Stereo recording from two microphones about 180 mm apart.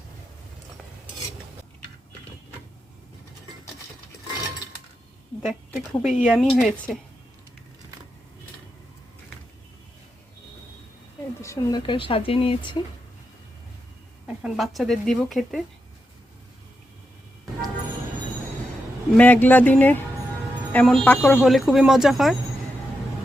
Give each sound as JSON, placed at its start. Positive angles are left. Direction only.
{"t": 5.5, "sound": "speech", "side_deg": 0}
{"t": 11.3, "sound": "speech", "side_deg": 15}
{"t": 14.3, "sound": "speech", "side_deg": -5}
{"t": 19.1, "sound": "speech", "side_deg": 10}